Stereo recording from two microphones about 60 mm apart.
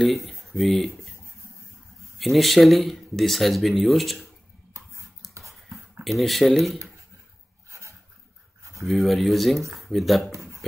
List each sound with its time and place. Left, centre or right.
0.0 s speech: centre
2.1 s speech: centre
6.0 s speech: centre
7.7 s a sound: right
8.8 s speech: centre
10.3 s a sound: right